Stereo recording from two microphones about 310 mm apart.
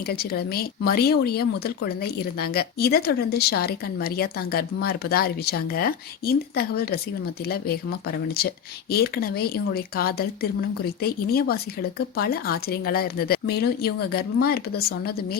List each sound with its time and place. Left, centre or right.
0.0 s speech: left